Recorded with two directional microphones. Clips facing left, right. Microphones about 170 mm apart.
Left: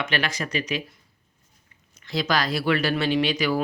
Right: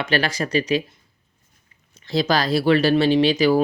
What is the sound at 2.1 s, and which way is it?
Speech, 30° right (ahead or behind).